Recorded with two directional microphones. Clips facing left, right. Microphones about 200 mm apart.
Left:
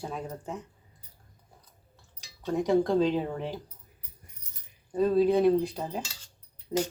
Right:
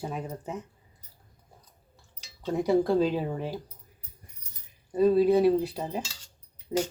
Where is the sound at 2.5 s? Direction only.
10° right (ahead or behind).